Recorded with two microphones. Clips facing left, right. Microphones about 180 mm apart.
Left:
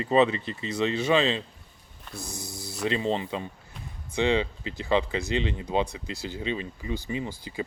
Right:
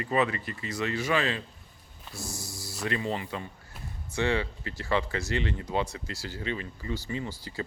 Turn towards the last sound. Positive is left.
turn(degrees=15)  # may be behind; listen again after turning